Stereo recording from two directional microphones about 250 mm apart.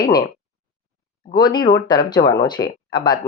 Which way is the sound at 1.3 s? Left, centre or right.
Centre.